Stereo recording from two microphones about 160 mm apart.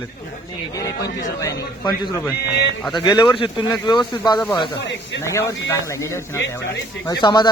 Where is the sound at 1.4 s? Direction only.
25° left (ahead or behind).